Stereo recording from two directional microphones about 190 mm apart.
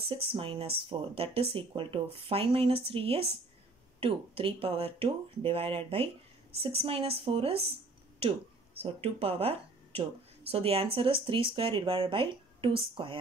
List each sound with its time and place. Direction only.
0.1 s a woman's voice: 30° right (ahead or behind)